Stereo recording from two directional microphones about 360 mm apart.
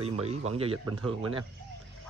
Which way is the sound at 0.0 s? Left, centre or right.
Centre.